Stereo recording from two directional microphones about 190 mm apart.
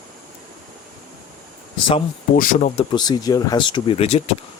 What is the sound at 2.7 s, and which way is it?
Speech, 25° left (ahead or behind).